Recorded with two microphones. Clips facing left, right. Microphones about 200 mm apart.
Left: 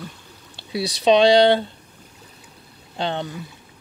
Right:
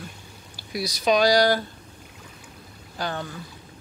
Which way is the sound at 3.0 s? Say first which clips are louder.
Left 5 dB; 25° left (ahead or behind).